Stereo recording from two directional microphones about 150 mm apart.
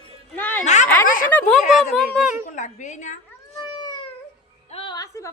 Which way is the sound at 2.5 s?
55° left (ahead or behind).